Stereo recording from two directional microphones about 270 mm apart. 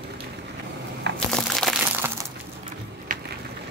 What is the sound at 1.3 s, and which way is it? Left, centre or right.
Crack, centre.